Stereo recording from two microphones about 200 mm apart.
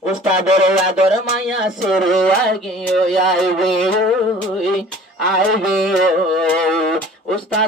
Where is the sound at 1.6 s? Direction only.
Centre (ahead or behind).